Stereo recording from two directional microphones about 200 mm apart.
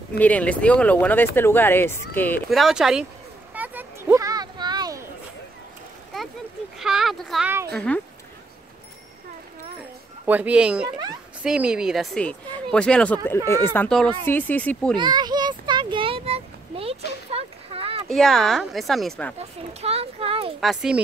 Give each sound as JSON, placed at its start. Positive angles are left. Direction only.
{"t": 0.2, "sound": "speech", "side_deg": 5}
{"t": 3.5, "sound": "a sound", "side_deg": -10}
{"t": 6.8, "sound": "speech", "side_deg": 0}
{"t": 10.2, "sound": "speech", "side_deg": -10}
{"t": 15.0, "sound": "a sound", "side_deg": -20}
{"t": 18.0, "sound": "speech", "side_deg": 0}
{"t": 19.3, "sound": "speech", "side_deg": -30}
{"t": 20.6, "sound": "speech", "side_deg": -5}